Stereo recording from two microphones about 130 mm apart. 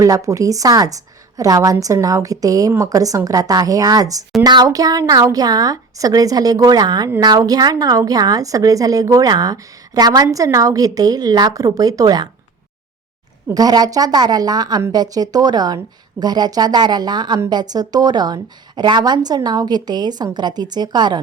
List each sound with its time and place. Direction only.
0.0 s a woman's voice: 25° right (ahead or behind)
13.5 s a woman's voice: 30° right (ahead or behind)